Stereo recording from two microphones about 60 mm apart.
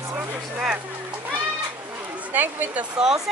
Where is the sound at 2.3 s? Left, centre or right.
Right.